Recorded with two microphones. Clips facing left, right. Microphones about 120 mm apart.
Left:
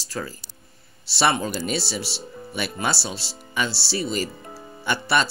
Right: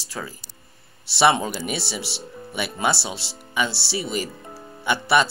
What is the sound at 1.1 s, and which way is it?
Speech, 20° right (ahead or behind).